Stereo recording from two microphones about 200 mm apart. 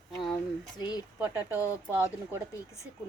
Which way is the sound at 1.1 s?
10° right (ahead or behind).